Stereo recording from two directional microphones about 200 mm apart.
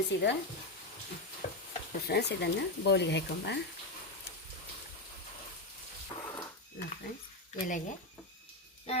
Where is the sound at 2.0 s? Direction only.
55° left (ahead or behind).